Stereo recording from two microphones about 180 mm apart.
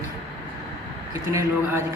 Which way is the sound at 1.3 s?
15° right (ahead or behind).